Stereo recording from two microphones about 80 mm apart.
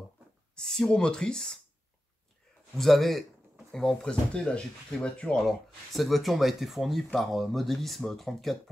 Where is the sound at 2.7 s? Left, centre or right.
Centre.